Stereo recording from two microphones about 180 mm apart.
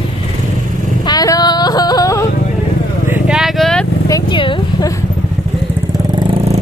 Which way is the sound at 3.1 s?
5° right (ahead or behind).